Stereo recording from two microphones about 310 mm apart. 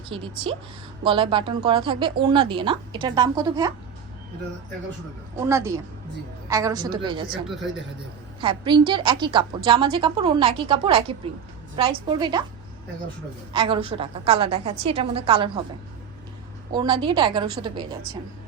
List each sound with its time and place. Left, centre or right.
0.1 s speech: centre
5.4 s speech: centre
7.4 s speech: centre
8.4 s speech: centre
13.5 s speech: centre
16.7 s speech: centre